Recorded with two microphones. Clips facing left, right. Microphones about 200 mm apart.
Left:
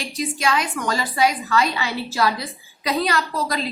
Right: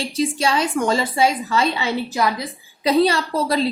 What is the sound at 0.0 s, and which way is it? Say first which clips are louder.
A woman's voice: right 4 dB; 30° right (ahead or behind).